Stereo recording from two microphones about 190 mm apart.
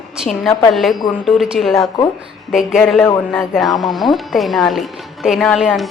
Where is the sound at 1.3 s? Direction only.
5° right (ahead or behind).